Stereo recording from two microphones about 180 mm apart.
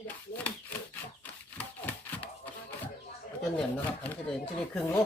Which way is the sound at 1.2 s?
10° left (ahead or behind).